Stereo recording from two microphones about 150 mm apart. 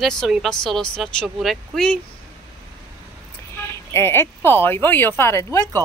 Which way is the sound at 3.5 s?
15° left (ahead or behind).